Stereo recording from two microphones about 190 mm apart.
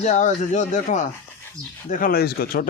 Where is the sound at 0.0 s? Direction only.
40° left (ahead or behind).